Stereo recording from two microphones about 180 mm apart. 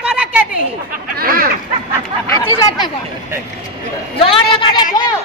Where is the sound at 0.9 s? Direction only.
55° right (ahead or behind).